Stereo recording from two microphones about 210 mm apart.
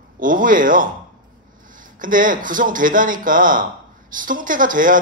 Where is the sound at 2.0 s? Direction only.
40° right (ahead or behind).